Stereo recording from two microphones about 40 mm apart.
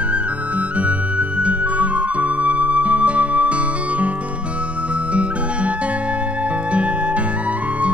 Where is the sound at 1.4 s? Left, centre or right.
Right.